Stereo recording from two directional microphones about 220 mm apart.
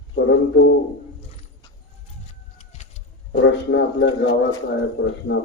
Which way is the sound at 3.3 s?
50° left (ahead or behind).